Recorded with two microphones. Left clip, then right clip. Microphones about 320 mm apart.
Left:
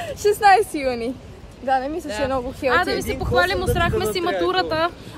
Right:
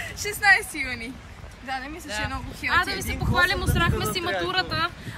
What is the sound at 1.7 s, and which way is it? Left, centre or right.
A woman's voice, centre.